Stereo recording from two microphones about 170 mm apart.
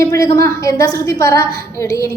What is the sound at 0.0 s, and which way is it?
A woman's voice, 20° left (ahead or behind).